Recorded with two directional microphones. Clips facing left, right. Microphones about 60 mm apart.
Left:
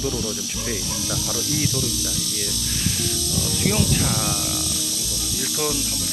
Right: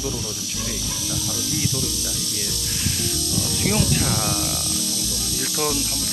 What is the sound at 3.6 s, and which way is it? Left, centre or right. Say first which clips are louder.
Speech: even; centre.